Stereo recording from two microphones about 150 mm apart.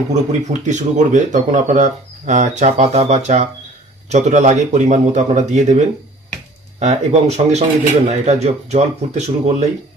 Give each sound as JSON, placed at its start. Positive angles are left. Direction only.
{"t": 0.1, "sound": "speech", "side_deg": -50}